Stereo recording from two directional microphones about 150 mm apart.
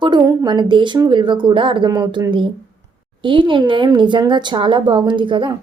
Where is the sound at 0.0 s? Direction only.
25° right (ahead or behind).